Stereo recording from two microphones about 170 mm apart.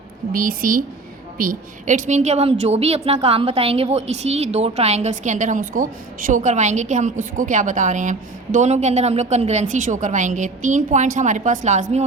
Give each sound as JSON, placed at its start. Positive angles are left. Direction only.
{"t": 0.3, "sound": "a woman's voice", "side_deg": -55}